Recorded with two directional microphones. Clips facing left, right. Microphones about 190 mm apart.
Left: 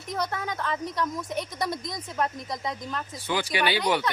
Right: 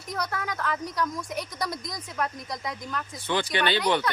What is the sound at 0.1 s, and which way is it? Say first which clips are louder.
Speech: left 1 dB; 25° left (ahead or behind).